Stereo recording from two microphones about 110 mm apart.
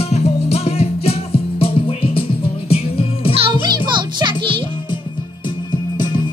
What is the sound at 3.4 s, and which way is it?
Music, 45° right (ahead or behind).